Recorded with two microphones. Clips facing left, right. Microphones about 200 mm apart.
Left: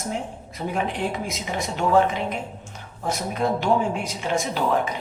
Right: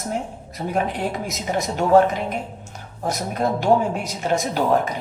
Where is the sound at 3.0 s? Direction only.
40° right (ahead or behind).